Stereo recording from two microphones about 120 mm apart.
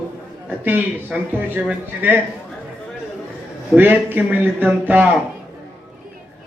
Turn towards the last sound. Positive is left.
turn(degrees=-15)  # may be behind; listen again after turning